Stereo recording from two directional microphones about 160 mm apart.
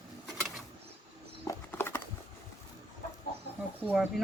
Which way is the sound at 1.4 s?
15° left (ahead or behind).